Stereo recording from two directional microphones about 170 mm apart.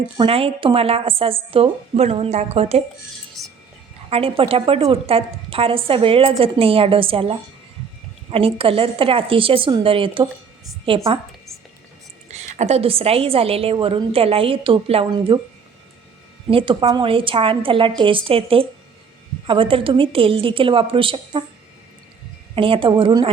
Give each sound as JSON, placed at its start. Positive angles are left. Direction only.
{"t": 0.2, "sound": "a woman's voice", "side_deg": -35}
{"t": 4.1, "sound": "a woman's voice", "side_deg": -35}
{"t": 12.3, "sound": "a woman's voice", "side_deg": -40}
{"t": 16.5, "sound": "a woman's voice", "side_deg": -30}
{"t": 22.5, "sound": "a woman's voice", "side_deg": -30}